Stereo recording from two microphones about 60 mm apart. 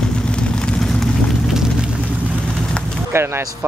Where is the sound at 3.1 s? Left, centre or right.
Right.